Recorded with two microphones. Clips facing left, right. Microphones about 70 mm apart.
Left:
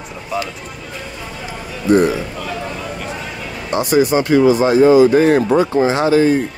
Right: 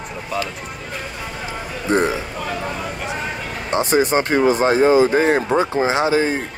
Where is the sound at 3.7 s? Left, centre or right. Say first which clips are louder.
Left 3 dB; right.